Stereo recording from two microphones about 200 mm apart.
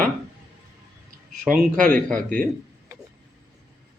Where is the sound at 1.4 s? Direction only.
40° right (ahead or behind).